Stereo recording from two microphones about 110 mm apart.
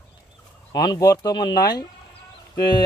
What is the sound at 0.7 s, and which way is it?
Speech, 35° left (ahead or behind).